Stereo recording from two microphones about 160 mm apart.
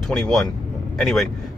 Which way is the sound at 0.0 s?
Centre (ahead or behind).